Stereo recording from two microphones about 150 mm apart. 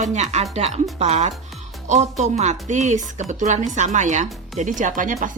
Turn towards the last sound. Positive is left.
turn(degrees=-60)  # may be behind; listen again after turning